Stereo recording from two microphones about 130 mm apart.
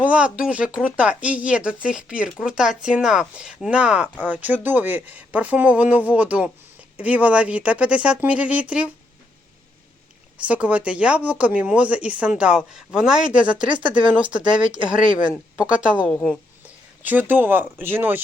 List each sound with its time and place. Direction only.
0.0 s speech: 10° right (ahead or behind)
10.4 s speech: 10° right (ahead or behind)
13.7 s speech: 40° right (ahead or behind)
14.1 s speech: 10° right (ahead or behind)
14.4 s speech: 40° right (ahead or behind)
15.3 s speech: 10° right (ahead or behind)